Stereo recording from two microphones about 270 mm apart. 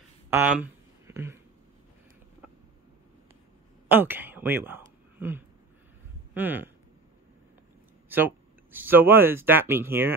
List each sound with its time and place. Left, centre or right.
0.3 s a sound: centre
3.9 s speech: centre
8.7 s speech: centre